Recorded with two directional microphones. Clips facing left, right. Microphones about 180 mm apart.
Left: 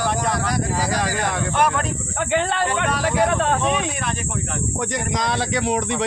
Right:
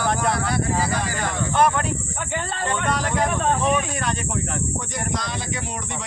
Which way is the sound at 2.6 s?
5° left (ahead or behind).